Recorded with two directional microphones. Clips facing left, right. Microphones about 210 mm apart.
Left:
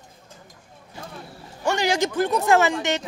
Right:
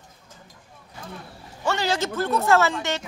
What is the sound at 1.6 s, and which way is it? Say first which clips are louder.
Speech: left 3 dB; 15° left (ahead or behind).